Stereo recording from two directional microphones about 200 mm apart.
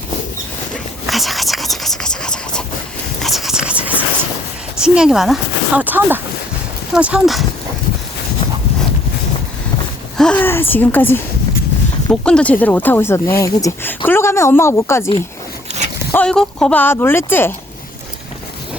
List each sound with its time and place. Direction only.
1.0 s a sound: centre (ahead or behind)
4.8 s speech: 5° right (ahead or behind)
10.2 s speech: 5° left (ahead or behind)
16.1 s speech: 5° left (ahead or behind)